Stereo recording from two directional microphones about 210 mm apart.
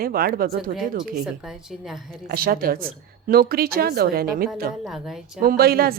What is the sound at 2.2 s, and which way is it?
A woman's voice, 45° right (ahead or behind).